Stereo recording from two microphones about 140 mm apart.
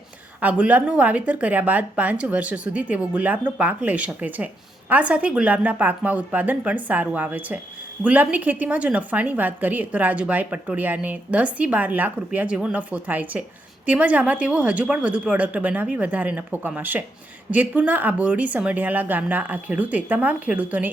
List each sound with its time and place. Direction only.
0.3 s a woman's voice: 10° right (ahead or behind)